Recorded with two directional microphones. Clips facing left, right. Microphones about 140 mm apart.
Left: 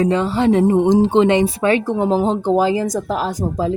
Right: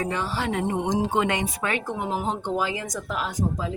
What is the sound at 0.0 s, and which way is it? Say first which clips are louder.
Speech: left 11 dB; 25° left (ahead or behind).